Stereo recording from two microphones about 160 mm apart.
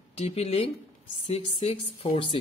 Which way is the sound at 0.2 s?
40° left (ahead or behind).